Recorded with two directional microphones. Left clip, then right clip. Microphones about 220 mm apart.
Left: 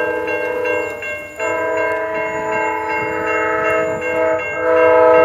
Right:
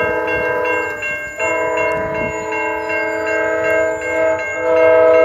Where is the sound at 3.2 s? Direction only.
15° left (ahead or behind).